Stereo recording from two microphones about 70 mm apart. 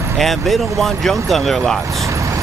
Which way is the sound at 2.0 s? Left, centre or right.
Right.